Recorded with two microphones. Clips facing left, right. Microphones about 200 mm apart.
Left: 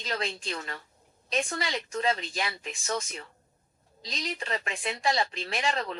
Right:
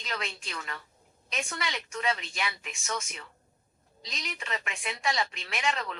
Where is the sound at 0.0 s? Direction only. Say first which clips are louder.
Left 4 dB; 35° left (ahead or behind).